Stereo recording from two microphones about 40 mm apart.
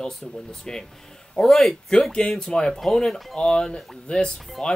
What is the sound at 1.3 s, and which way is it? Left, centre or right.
Speech, centre.